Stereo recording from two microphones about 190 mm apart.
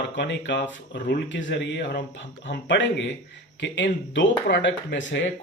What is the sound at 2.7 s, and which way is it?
Speech, 75° left (ahead or behind).